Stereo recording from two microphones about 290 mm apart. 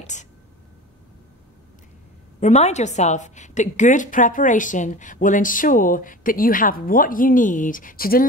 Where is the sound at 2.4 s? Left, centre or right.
Left.